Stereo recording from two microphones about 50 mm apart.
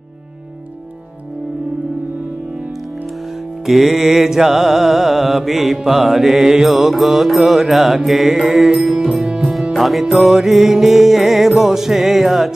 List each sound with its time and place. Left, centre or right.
3.6 s music: centre